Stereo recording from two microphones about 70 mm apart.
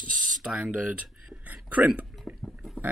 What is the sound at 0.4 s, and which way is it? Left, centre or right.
Speech, centre.